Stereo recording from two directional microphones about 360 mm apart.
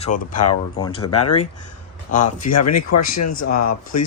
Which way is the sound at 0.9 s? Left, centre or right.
Left.